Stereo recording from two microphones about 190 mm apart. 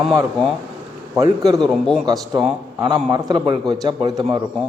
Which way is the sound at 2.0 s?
20° right (ahead or behind).